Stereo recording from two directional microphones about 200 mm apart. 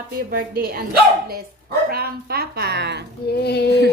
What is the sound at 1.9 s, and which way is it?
A woman's voice, 50° right (ahead or behind).